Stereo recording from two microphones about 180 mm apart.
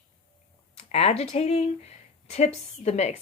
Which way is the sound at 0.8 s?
35° left (ahead or behind).